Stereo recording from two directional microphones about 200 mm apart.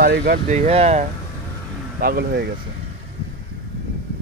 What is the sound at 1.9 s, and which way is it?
Speech, 50° right (ahead or behind).